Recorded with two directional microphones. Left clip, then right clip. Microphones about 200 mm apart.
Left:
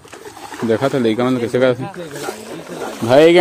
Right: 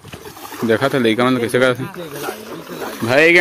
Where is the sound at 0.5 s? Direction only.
10° left (ahead or behind).